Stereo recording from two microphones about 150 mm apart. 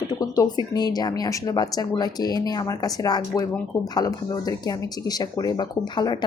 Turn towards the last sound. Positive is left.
turn(degrees=30)  # may be behind; listen again after turning